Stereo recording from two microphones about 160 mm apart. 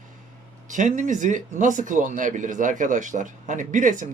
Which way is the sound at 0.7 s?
50° right (ahead or behind).